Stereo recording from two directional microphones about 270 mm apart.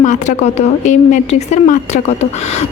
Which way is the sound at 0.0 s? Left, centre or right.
Left.